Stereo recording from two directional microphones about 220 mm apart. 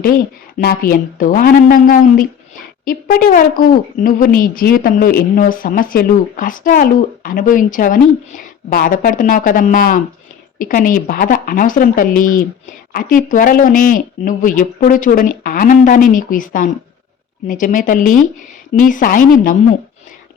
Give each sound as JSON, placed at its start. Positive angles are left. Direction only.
{"t": 0.6, "sound": "a woman's voice", "side_deg": 45}